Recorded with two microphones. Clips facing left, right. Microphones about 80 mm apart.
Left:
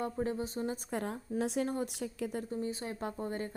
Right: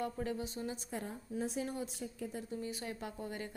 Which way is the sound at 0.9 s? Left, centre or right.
Left.